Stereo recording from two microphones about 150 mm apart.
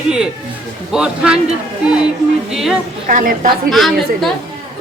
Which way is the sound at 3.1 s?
65° right (ahead or behind).